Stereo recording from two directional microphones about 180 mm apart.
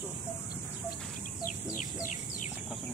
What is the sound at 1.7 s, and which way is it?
Bird, 45° left (ahead or behind).